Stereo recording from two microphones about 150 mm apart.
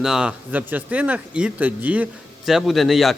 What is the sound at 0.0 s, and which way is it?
Speech, 5° right (ahead or behind).